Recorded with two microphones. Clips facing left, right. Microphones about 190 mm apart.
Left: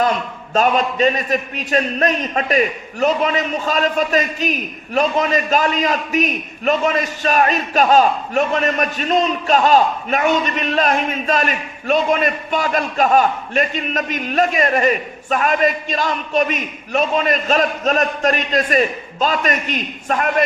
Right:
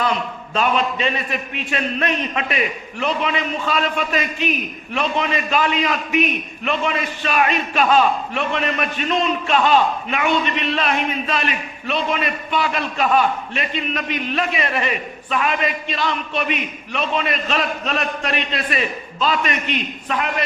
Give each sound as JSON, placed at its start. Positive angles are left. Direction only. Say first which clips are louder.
{"t": 0.5, "sound": "a man's voice", "louder": "left 4 dB", "side_deg": 45}